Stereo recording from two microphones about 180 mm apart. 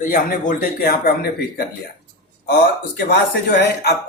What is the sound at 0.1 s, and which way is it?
Speech, 50° left (ahead or behind).